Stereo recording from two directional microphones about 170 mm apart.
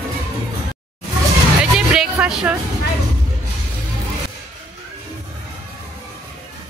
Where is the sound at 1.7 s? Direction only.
5° right (ahead or behind).